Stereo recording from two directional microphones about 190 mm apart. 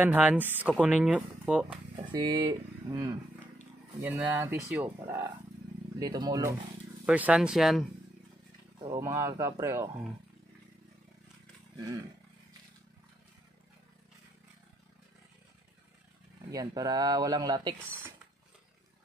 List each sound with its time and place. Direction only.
0.0 s speech: 10° right (ahead or behind)
2.0 s speech: 20° right (ahead or behind)
4.0 s speech: 10° right (ahead or behind)
7.1 s speech: 5° right (ahead or behind)
8.8 s speech: 15° right (ahead or behind)
16.4 s speech: 20° right (ahead or behind)